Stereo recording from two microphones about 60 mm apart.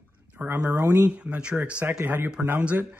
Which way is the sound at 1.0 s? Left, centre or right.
Right.